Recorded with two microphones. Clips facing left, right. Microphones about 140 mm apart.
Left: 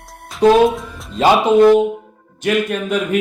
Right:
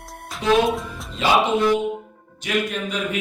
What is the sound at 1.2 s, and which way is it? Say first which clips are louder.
Speech: left 8 dB; 45° left (ahead or behind).